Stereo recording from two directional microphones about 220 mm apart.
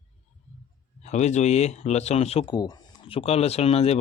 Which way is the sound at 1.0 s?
30° left (ahead or behind).